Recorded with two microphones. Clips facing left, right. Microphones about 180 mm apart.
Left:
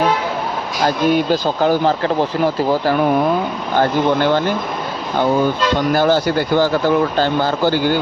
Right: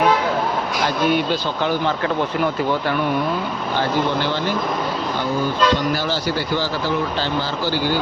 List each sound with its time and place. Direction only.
0.9 s speech: 40° left (ahead or behind)
3.8 s speech: 50° left (ahead or behind)
5.9 s speech: 55° left (ahead or behind)